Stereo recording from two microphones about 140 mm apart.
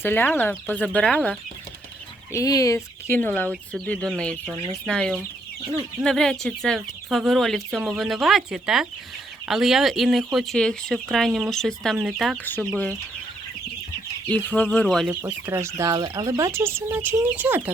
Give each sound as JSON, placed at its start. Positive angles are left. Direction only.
{"t": 0.0, "sound": "speech", "side_deg": 15}
{"t": 2.3, "sound": "speech", "side_deg": 25}
{"t": 12.5, "sound": "speech", "side_deg": 10}
{"t": 14.3, "sound": "speech", "side_deg": 10}
{"t": 15.0, "sound": "speech", "side_deg": -10}